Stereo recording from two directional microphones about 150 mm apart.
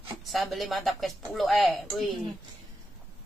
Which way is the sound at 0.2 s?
Centre (ahead or behind).